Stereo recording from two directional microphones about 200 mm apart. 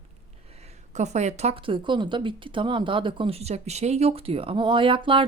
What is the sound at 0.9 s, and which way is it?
Speech, 35° right (ahead or behind).